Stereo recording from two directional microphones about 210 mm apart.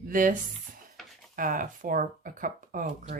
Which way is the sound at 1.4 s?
40° right (ahead or behind).